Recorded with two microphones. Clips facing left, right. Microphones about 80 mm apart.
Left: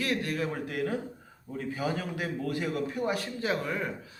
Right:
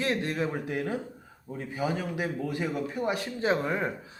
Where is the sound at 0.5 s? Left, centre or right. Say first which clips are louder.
Even; centre.